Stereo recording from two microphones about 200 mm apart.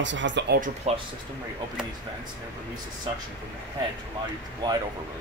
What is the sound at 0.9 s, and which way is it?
Speech, 35° right (ahead or behind).